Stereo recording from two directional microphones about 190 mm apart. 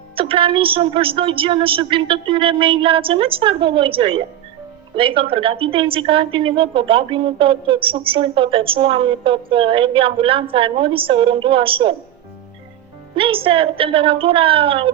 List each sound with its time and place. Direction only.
0.2 s a woman's voice: 30° right (ahead or behind)
13.1 s a woman's voice: 30° right (ahead or behind)